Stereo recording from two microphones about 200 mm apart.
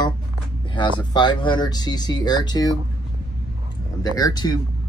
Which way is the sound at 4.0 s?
20° left (ahead or behind).